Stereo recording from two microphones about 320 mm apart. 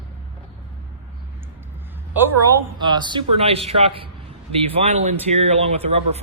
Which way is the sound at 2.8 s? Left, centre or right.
Centre.